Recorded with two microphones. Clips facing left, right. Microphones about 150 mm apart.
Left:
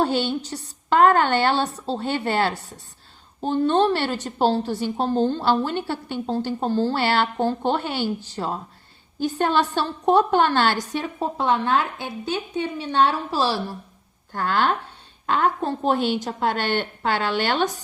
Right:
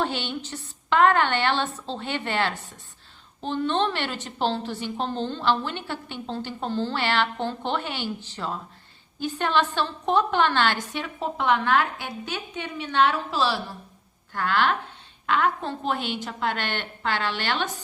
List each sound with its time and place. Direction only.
0.0 s a woman's voice: 40° left (ahead or behind)